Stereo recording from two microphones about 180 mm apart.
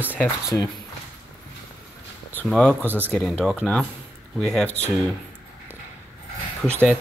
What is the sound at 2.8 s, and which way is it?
Speech, 10° right (ahead or behind).